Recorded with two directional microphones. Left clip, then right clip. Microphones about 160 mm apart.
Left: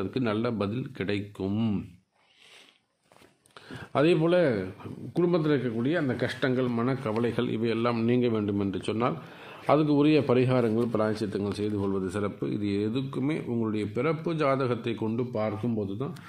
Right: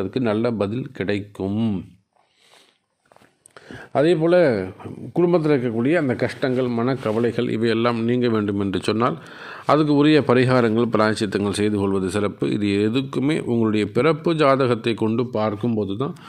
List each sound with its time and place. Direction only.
0.0 s speech: 30° right (ahead or behind)
3.6 s speech: 20° right (ahead or behind)
6.2 s speech: 10° right (ahead or behind)
6.9 s speech: 25° right (ahead or behind)
7.3 s speech: 40° right (ahead or behind)
7.9 s speech: 20° right (ahead or behind)
8.2 s a man's voice: 45° right (ahead or behind)
9.0 s a man's voice: 35° right (ahead or behind); by 13.8 s 80° right
13.9 s a man's voice: 45° right (ahead or behind); by 16.1 s 65° right (ahead or behind)